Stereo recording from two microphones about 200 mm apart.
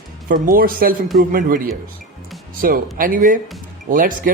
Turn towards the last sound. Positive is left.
turn(degrees=-45)  # may be behind; listen again after turning